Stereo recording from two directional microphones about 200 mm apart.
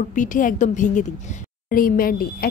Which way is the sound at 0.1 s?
40° left (ahead or behind).